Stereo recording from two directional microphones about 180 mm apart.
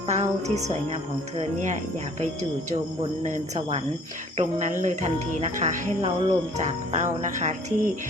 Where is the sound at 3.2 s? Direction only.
35° right (ahead or behind).